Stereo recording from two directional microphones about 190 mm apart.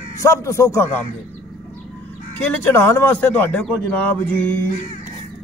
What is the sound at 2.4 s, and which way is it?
A man's voice, 10° left (ahead or behind).